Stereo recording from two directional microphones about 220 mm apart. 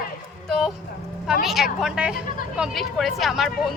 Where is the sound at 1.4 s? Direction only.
Centre (ahead or behind).